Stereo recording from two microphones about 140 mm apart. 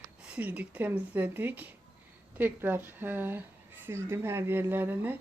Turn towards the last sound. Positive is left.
turn(degrees=-15)  # may be behind; listen again after turning